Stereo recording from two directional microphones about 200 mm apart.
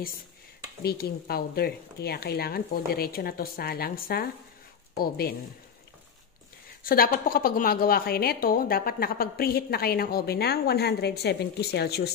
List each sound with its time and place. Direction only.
0.8 s a woman's voice: 50° left (ahead or behind)
6.8 s a woman's voice: 45° left (ahead or behind)